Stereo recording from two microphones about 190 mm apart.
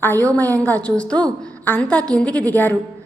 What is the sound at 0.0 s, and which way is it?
A woman's voice, 10° left (ahead or behind).